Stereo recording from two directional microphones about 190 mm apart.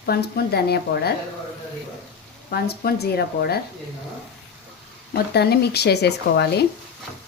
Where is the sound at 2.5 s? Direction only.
55° left (ahead or behind).